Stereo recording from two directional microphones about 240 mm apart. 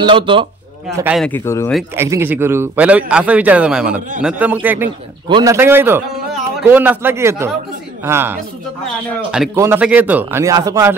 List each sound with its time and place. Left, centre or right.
0.0 s a man's voice: right
0.9 s a man's voice: centre
1.8 s a man's voice: centre
9.6 s a man's voice: centre